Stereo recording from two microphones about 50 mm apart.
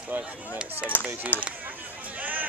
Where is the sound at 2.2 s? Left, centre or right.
Right.